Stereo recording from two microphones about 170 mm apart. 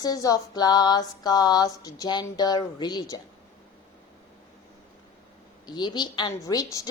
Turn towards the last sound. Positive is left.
turn(degrees=25)  # may be behind; listen again after turning